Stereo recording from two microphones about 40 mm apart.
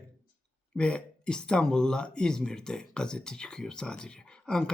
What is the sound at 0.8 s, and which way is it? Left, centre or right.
Speech, left.